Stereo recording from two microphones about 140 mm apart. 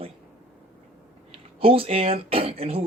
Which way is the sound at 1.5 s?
40° right (ahead or behind).